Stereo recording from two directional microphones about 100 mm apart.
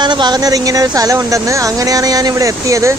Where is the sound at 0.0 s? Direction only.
50° right (ahead or behind).